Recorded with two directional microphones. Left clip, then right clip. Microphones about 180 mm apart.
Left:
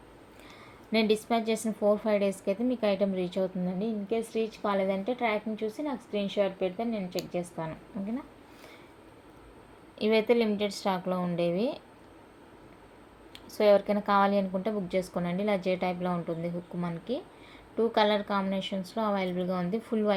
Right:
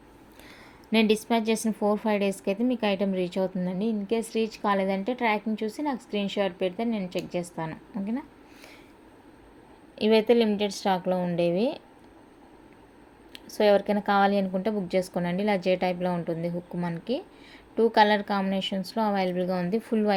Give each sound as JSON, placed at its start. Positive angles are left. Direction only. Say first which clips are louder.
{"t": 0.9, "sound": "a woman's voice", "louder": "right 3 dB", "side_deg": -55}
{"t": 10.0, "sound": "a woman's voice", "louder": "right 4 dB", "side_deg": -45}
{"t": 13.3, "sound": "a woman's voice", "louder": "right 1 dB", "side_deg": -45}